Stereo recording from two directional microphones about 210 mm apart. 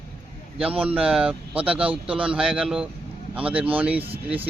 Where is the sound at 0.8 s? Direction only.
5° right (ahead or behind).